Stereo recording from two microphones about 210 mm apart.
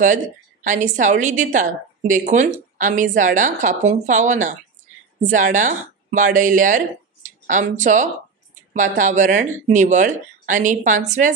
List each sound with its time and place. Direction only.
0.7 s a woman's voice: 35° right (ahead or behind)